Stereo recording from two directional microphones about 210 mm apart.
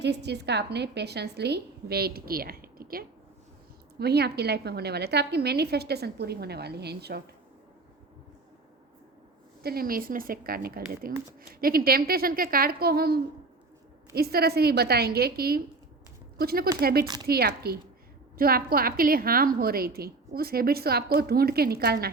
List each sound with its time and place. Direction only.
0.0 s a woman's voice: 55° right (ahead or behind)
9.6 s a woman's voice: 45° right (ahead or behind)